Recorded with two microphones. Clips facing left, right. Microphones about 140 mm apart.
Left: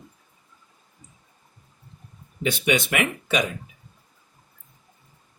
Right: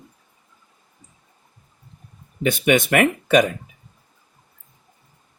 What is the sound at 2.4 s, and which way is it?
Speech, 50° right (ahead or behind).